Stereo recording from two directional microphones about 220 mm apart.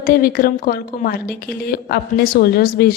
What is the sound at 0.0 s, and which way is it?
A woman's voice, 40° left (ahead or behind).